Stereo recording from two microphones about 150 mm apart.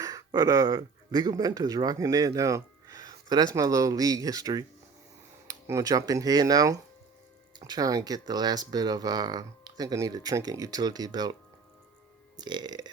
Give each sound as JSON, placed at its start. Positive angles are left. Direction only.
{"t": 0.0, "sound": "speech", "side_deg": -20}
{"t": 12.4, "sound": "speech", "side_deg": -30}